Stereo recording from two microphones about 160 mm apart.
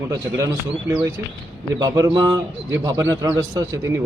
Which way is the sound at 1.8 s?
20° right (ahead or behind).